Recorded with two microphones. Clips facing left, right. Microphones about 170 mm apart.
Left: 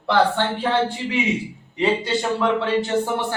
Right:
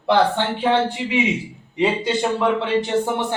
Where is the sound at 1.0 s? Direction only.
15° right (ahead or behind).